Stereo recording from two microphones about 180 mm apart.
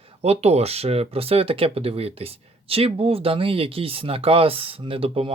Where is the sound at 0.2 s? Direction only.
35° right (ahead or behind).